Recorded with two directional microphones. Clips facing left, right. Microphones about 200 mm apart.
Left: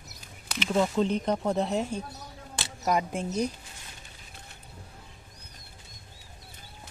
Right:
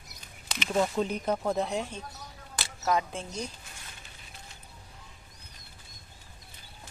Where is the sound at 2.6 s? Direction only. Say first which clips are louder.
Left 1 dB; 15° left (ahead or behind).